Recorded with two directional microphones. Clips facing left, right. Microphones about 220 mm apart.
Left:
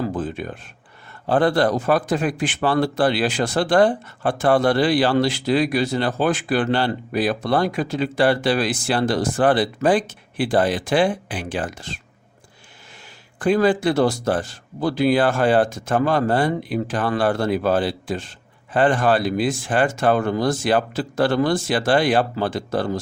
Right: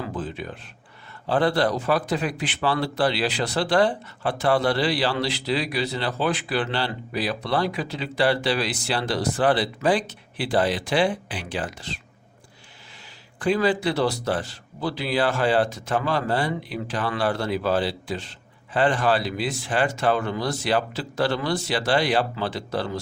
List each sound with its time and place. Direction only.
0.0 s a sound: 45° left (ahead or behind)
1.3 s speech: 50° left (ahead or behind)
13.4 s speech: 50° left (ahead or behind)